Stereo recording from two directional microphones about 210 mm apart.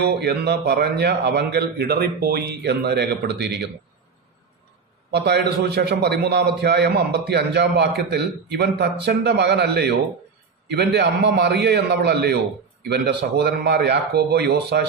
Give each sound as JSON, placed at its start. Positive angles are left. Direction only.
{"t": 0.0, "sound": "a man's voice", "side_deg": -50}
{"t": 5.1, "sound": "a man's voice", "side_deg": -50}